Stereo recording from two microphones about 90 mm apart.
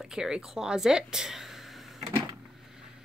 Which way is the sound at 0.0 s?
5° right (ahead or behind).